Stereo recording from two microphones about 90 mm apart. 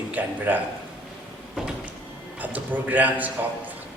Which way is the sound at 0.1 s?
20° right (ahead or behind).